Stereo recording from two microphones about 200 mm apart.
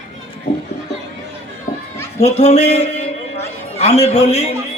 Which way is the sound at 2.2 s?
35° left (ahead or behind).